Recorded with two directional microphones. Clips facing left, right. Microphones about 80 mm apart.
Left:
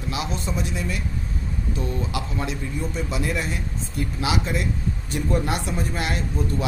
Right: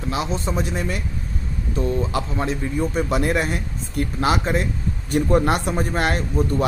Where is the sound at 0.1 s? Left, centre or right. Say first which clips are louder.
Right 4 dB; right.